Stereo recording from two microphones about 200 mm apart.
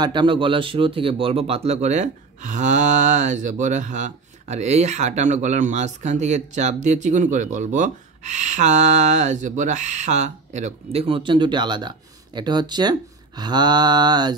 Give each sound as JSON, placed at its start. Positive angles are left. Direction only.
{"t": 0.0, "sound": "speech", "side_deg": -25}
{"t": 12.4, "sound": "mantra", "side_deg": -20}